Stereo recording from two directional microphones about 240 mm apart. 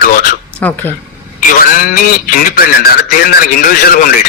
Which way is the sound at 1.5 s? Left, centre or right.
Left.